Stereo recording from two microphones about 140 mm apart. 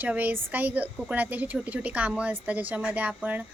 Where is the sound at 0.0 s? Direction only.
10° right (ahead or behind).